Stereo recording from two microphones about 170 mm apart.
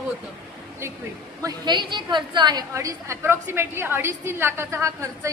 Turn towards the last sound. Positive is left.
turn(degrees=-15)  # may be behind; listen again after turning